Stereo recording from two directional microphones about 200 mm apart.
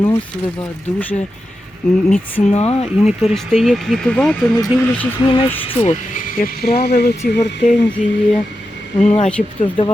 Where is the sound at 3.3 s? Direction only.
Centre (ahead or behind).